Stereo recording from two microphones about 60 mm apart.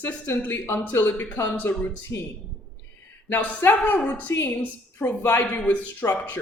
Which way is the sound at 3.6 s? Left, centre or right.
Left.